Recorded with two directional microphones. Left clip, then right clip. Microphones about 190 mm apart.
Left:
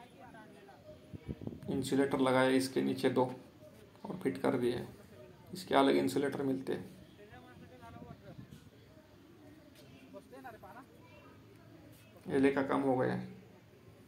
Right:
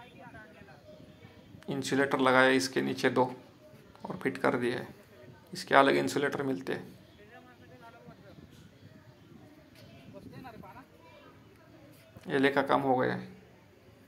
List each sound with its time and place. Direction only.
1.7 s speech: 10° right (ahead or behind)
12.3 s a man's voice: 20° right (ahead or behind)
12.5 s speech: 35° right (ahead or behind)